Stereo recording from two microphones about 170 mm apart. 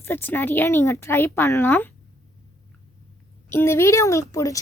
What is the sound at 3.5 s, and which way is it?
A woman's voice, 15° left (ahead or behind).